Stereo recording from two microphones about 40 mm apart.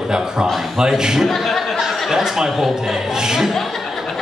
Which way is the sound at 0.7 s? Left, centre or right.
Centre.